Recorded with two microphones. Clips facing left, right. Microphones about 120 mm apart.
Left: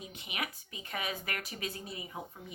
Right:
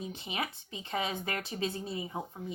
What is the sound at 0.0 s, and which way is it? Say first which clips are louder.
A woman's voice: right 4 dB; 30° right (ahead or behind).